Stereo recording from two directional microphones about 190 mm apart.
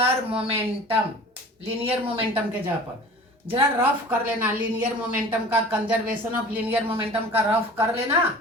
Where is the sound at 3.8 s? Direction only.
10° right (ahead or behind).